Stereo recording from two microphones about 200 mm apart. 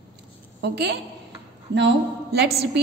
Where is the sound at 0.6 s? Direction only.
55° right (ahead or behind).